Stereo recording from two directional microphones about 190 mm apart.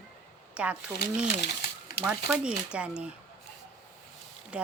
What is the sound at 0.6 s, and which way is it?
Speech, 5° right (ahead or behind).